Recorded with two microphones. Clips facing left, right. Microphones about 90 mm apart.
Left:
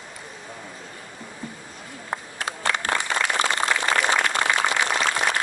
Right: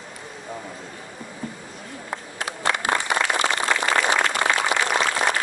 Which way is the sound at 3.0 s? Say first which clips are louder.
Right 1 dB; 20° right (ahead or behind).